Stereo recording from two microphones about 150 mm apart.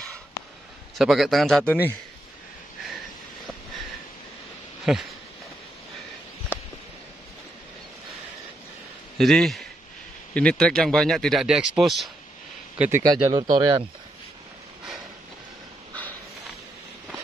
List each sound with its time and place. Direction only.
0.9 s speech: centre (ahead or behind)
4.9 s speech: 5° right (ahead or behind)
6.5 s a sound: 10° left (ahead or behind)
9.2 s speech: centre (ahead or behind)
13.0 s speech: 25° right (ahead or behind)